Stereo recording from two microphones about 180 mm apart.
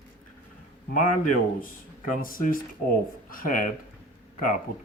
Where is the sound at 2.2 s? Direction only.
50° left (ahead or behind).